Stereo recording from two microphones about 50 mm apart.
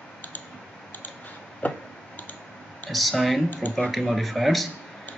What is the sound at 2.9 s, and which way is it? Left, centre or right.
Speech, centre.